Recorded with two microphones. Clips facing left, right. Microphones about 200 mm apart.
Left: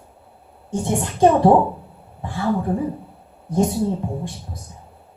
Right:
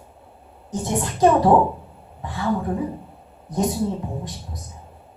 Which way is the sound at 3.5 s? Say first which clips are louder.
Left 5 dB; 25° left (ahead or behind).